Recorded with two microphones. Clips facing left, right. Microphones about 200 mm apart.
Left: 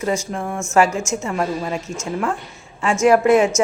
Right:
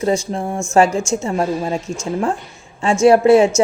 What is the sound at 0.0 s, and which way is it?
Speech, 30° right (ahead or behind).